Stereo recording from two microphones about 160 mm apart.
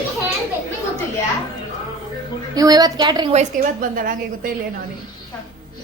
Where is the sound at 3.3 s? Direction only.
50° right (ahead or behind).